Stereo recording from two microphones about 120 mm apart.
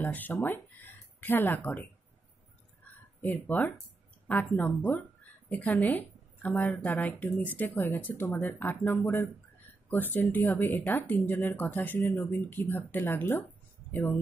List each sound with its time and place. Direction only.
0.0 s speech: 15° left (ahead or behind)
3.2 s a woman's voice: 15° left (ahead or behind)